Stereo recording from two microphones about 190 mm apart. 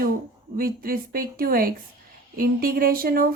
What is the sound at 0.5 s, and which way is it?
Speech, 50° right (ahead or behind).